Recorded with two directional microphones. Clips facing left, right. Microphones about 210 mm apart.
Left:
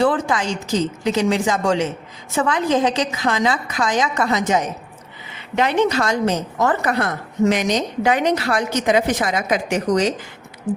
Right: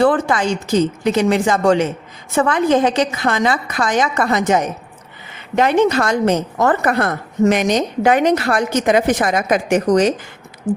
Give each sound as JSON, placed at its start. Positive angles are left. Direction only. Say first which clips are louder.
{"t": 0.0, "sound": "a woman's voice", "louder": "right 4 dB", "side_deg": -55}